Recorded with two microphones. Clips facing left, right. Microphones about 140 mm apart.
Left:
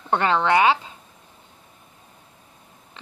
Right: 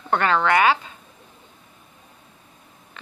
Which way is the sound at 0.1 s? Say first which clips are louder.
Even; 25° left (ahead or behind).